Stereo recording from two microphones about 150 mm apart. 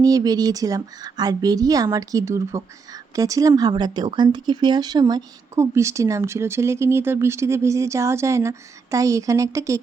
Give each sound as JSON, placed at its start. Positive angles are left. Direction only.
{"t": 0.0, "sound": "speech", "side_deg": -25}